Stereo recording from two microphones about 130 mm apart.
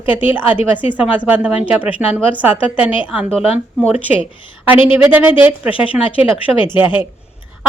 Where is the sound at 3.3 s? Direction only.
50° left (ahead or behind).